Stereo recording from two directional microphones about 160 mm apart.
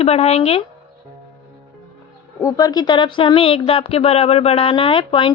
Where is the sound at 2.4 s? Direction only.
25° left (ahead or behind).